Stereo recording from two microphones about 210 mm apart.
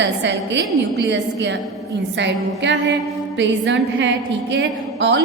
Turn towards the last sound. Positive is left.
turn(degrees=-60)  # may be behind; listen again after turning